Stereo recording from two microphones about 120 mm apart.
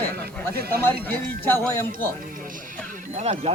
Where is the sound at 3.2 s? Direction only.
60° right (ahead or behind).